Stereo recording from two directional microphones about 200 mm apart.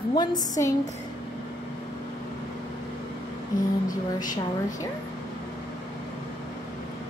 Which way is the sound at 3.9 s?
40° left (ahead or behind).